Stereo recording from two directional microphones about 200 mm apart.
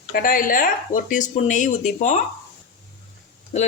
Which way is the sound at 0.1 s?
45° left (ahead or behind).